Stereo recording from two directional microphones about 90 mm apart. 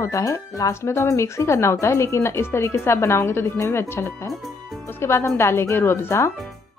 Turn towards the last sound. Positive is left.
turn(degrees=30)  # may be behind; listen again after turning